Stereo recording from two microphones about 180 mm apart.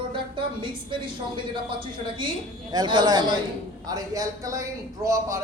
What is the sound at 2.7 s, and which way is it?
A man's voice, 20° right (ahead or behind).